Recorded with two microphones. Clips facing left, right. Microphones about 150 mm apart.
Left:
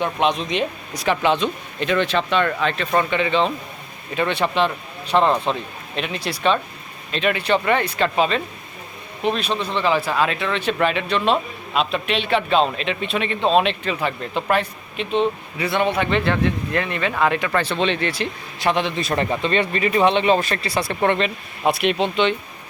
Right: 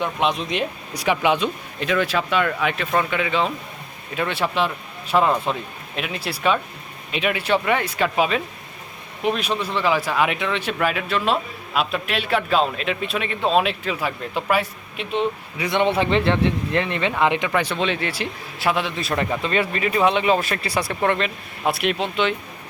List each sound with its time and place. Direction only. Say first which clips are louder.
0.0 s speech: left 2 dB; centre (ahead or behind); by 15.9 s 15° right (ahead or behind)
15.9 s speech: right 1 dB; 30° right (ahead or behind); by 20.9 s 10° right (ahead or behind)
21.0 s speech: left 3 dB; centre (ahead or behind)